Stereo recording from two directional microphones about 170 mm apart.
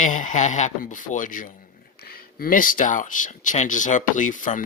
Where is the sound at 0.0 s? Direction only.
50° left (ahead or behind).